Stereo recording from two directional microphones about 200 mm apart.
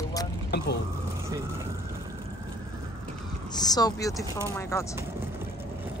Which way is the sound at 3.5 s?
20° left (ahead or behind).